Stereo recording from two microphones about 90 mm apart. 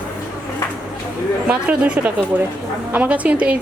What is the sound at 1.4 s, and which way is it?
A woman's voice, 10° right (ahead or behind).